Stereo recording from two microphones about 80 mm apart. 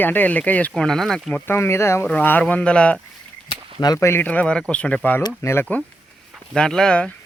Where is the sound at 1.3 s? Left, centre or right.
Left.